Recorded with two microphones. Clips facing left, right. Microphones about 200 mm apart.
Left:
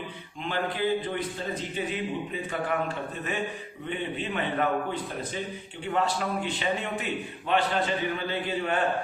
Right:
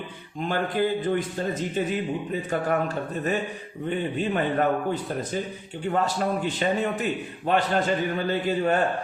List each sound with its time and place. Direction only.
0.4 s mantra: 45° right (ahead or behind)
1.5 s a man's voice: 45° right (ahead or behind)
5.8 s a man's voice: 40° right (ahead or behind)